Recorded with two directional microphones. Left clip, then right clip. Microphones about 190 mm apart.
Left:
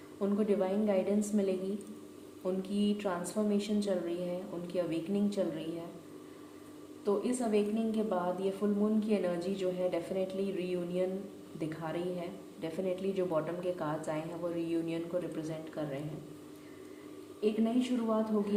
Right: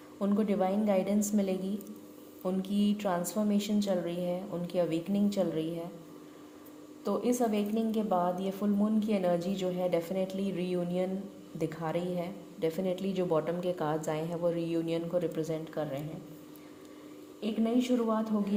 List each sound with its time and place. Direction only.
0.2 s a woman's voice: 40° right (ahead or behind)
7.0 s a woman's voice: 40° right (ahead or behind)
17.4 s a woman's voice: 35° right (ahead or behind)